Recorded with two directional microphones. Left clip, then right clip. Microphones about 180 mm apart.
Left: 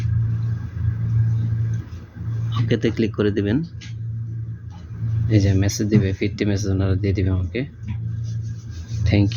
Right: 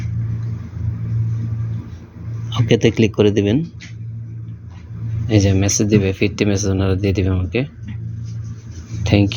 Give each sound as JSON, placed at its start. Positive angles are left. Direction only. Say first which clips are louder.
{"t": 2.5, "sound": "speech", "louder": "right 7 dB", "side_deg": -15}
{"t": 5.3, "sound": "speech", "louder": "right 5 dB", "side_deg": -20}
{"t": 9.0, "sound": "speech", "louder": "right 5 dB", "side_deg": -20}